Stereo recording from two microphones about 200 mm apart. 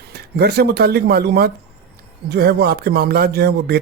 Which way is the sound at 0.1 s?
55° right (ahead or behind).